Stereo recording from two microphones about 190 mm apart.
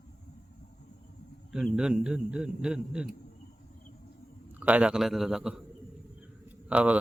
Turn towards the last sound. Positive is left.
turn(degrees=-5)  # may be behind; listen again after turning